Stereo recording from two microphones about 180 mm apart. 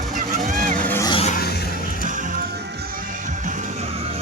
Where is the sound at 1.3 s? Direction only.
60° left (ahead or behind).